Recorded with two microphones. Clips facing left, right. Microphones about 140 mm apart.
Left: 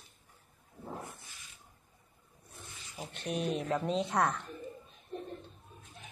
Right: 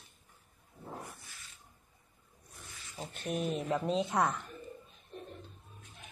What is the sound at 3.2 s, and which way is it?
Speech, centre (ahead or behind).